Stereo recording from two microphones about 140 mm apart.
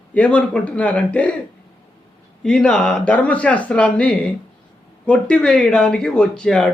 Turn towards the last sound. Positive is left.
turn(degrees=5)  # may be behind; listen again after turning